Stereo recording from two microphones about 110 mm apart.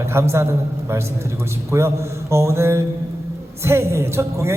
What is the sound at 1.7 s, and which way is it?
A man's voice, 25° right (ahead or behind).